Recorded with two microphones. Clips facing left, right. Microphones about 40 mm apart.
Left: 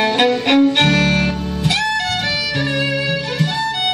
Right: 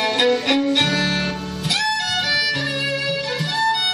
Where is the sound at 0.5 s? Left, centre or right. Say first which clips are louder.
Left 5 dB; left.